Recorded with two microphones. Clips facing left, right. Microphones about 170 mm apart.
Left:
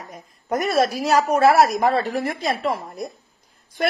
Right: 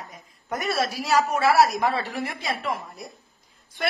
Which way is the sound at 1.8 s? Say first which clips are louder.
Left 5 dB; 40° left (ahead or behind).